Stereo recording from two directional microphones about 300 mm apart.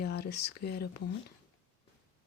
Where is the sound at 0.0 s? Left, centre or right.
Left.